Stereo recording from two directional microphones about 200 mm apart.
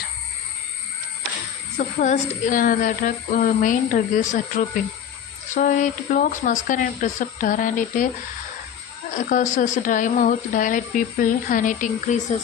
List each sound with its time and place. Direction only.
1.8 s speech: 40° left (ahead or behind)
9.1 s speech: 40° left (ahead or behind)